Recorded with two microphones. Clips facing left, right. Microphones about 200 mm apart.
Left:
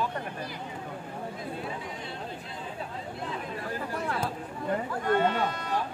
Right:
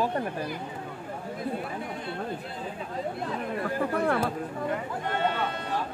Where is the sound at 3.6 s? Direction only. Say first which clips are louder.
Right 8 dB; 60° right (ahead or behind).